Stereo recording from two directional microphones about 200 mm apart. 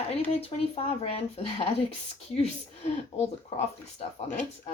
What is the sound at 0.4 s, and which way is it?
Speech, 30° left (ahead or behind).